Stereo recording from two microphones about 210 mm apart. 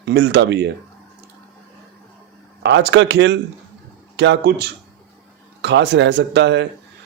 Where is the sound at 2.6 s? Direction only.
55° right (ahead or behind).